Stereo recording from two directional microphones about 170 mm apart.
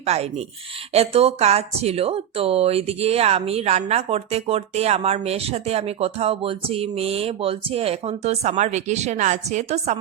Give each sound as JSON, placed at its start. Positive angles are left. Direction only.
{"t": 0.0, "sound": "speech", "side_deg": -40}